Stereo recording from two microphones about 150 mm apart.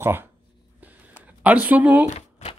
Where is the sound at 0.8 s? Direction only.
10° right (ahead or behind).